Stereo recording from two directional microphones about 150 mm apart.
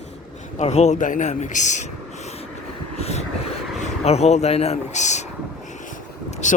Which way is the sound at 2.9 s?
45° left (ahead or behind).